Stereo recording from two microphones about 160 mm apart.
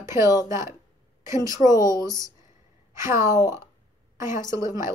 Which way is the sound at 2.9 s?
15° right (ahead or behind).